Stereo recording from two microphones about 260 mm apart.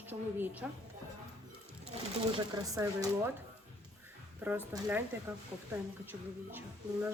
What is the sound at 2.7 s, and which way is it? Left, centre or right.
Speech, centre.